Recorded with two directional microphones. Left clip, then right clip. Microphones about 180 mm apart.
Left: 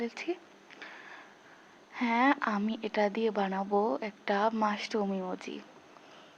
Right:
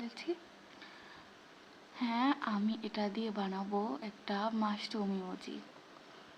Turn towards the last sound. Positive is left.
turn(degrees=40)  # may be behind; listen again after turning